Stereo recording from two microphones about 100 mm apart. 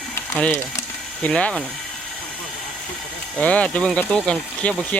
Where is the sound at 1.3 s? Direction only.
10° left (ahead or behind).